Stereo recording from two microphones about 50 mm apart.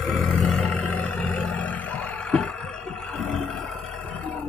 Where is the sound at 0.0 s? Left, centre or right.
Centre.